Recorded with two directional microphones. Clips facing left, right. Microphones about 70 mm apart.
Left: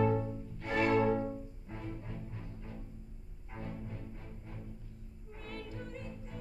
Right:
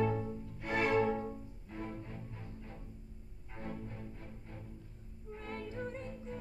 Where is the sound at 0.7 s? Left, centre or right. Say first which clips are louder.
Left 2 dB; centre.